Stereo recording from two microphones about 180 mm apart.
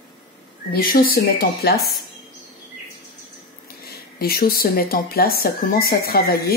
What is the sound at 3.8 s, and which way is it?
Speech, 60° left (ahead or behind).